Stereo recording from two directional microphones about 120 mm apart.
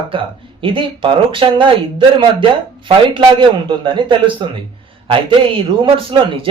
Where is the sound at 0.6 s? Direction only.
45° right (ahead or behind).